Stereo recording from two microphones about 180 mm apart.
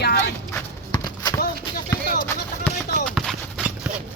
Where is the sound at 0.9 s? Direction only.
20° left (ahead or behind).